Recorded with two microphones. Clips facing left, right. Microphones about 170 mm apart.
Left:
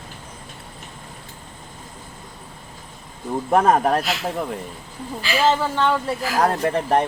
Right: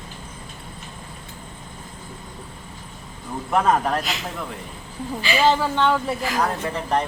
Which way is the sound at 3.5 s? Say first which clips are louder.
Left 3 dB; 45° left (ahead or behind).